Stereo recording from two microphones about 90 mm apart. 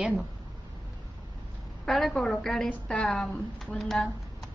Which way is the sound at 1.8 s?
Centre (ahead or behind).